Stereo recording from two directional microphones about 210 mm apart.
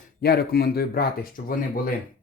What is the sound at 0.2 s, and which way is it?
Speech, 50° left (ahead or behind).